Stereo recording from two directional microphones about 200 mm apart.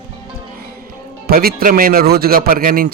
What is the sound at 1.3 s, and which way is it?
A man's voice, 50° right (ahead or behind).